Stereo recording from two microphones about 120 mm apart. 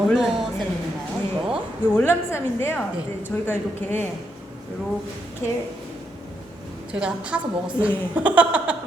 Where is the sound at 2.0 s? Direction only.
20° left (ahead or behind).